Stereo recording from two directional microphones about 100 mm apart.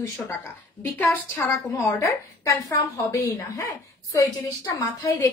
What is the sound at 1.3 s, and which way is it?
A woman's voice, 30° left (ahead or behind).